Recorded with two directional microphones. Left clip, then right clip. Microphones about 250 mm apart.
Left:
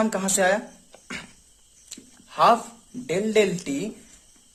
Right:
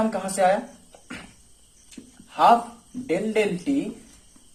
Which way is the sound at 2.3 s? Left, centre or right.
Left.